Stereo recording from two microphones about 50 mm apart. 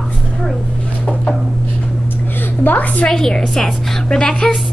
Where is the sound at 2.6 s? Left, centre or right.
Left.